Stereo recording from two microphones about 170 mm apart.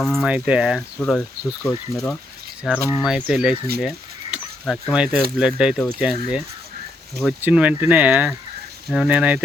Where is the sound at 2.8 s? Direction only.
20° left (ahead or behind).